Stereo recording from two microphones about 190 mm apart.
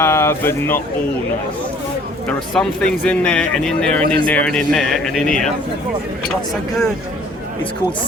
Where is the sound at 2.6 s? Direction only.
5° left (ahead or behind).